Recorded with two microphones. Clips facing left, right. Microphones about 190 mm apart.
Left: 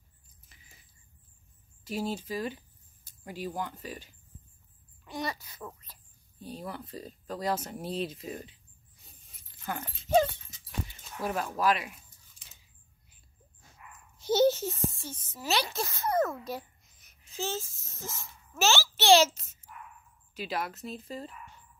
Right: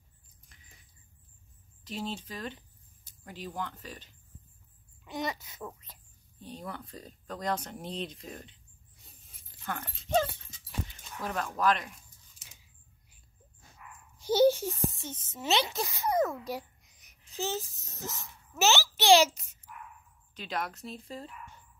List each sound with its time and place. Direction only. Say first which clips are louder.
0.5 s a sound: even; 5° left (ahead or behind)
1.9 s speech: left 4 dB; 10° left (ahead or behind)
5.0 s a child's voice: right 1 dB; 20° right (ahead or behind)
6.4 s speech: left 2 dB; 5° left (ahead or behind)
9.7 s speech: left 3 dB; 10° left (ahead or behind)
14.1 s a child's voice: right 1 dB; 10° right (ahead or behind)
20.3 s speech: left 2 dB; 5° left (ahead or behind)